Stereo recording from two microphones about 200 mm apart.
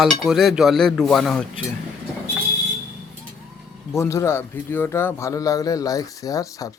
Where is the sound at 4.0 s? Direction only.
15° left (ahead or behind).